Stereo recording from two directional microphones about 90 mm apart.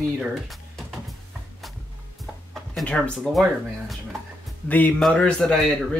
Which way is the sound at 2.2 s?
Centre (ahead or behind).